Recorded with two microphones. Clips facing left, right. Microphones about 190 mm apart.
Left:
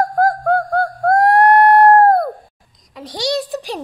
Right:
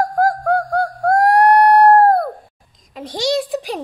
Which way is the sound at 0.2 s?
10° right (ahead or behind).